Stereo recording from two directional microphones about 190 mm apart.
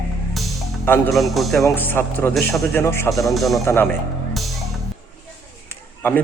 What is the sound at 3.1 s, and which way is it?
Speech, centre (ahead or behind).